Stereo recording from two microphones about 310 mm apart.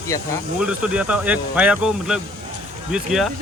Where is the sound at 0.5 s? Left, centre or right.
Centre.